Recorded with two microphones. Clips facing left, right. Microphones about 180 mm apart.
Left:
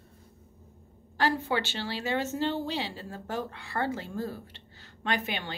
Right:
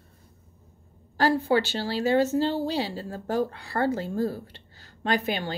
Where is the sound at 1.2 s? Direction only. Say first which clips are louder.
Right 6 dB; 35° right (ahead or behind).